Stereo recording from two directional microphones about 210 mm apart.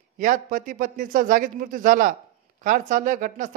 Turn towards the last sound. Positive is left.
turn(degrees=-40)  # may be behind; listen again after turning